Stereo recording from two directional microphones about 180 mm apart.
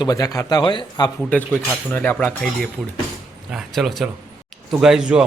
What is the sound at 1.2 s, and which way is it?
Speech, 5° left (ahead or behind).